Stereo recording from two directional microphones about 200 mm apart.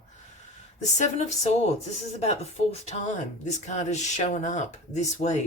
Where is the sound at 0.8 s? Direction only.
35° left (ahead or behind).